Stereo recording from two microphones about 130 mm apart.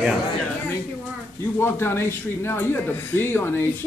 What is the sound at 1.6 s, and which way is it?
Speech, 20° left (ahead or behind).